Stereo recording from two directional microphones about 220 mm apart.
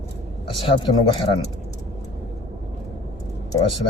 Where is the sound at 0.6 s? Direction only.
20° left (ahead or behind).